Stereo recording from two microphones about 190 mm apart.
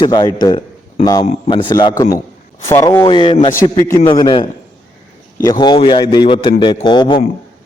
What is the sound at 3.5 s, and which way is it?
A man's voice, 15° left (ahead or behind).